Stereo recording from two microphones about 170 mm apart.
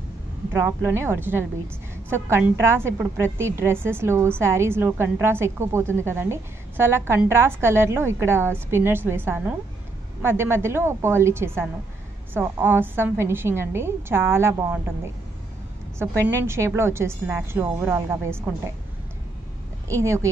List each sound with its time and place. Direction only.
0.5 s a woman's voice: 15° right (ahead or behind)
16.0 s a woman's voice: 15° right (ahead or behind)
19.9 s a woman's voice: 15° right (ahead or behind)